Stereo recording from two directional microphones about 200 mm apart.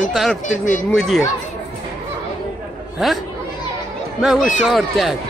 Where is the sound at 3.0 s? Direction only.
Centre (ahead or behind).